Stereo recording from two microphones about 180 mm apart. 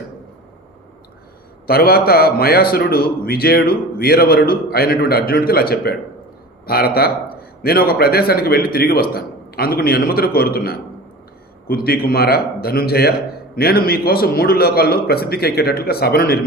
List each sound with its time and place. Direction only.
1.6 s a man's voice: 60° left (ahead or behind)